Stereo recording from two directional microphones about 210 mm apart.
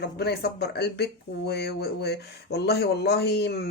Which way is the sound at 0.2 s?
50° left (ahead or behind).